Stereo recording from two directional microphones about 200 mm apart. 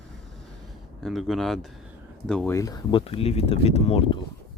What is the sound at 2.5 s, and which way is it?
Speech, 20° left (ahead or behind).